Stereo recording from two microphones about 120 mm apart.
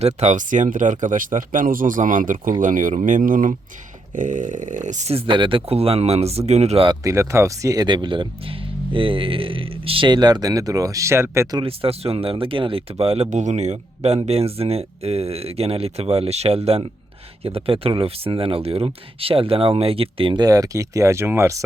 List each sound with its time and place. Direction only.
0.0 s speech: 80° right
5.1 s speech: 45° right (ahead or behind); by 6.8 s 65° right (ahead or behind)
7.0 s speech: 25° right (ahead or behind)
11.6 s speech: 55° right (ahead or behind)
13.3 s speech: 80° right
14.3 s speech: 55° right (ahead or behind)
20.4 s speech: 30° right (ahead or behind)